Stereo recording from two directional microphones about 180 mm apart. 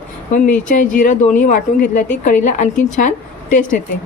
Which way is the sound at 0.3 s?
45° left (ahead or behind).